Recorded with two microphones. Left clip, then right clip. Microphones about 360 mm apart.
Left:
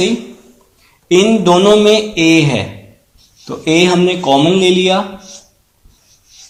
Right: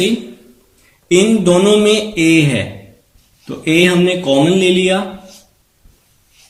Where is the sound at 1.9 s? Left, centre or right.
Left.